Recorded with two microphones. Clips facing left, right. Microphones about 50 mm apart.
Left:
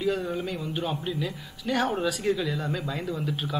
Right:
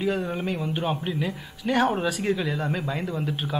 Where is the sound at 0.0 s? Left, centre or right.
Centre.